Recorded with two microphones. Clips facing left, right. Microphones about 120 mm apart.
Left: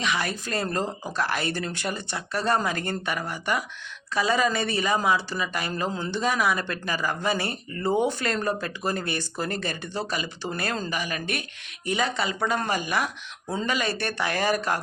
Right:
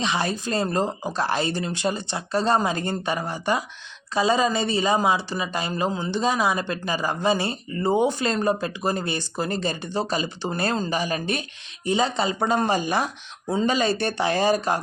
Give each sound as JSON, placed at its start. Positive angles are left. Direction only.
{"t": 0.0, "sound": "speech", "side_deg": -25}